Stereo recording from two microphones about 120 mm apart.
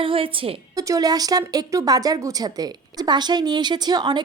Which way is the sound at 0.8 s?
30° right (ahead or behind).